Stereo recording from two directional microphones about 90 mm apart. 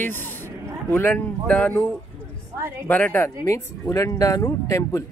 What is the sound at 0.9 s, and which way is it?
Speech, 15° left (ahead or behind).